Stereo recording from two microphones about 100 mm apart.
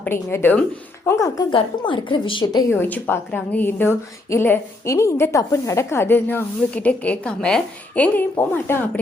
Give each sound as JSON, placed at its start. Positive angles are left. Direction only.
{"t": 0.0, "sound": "a woman's voice", "side_deg": 25}
{"t": 1.5, "sound": "a woman's voice", "side_deg": 55}
{"t": 2.6, "sound": "a woman's voice", "side_deg": 20}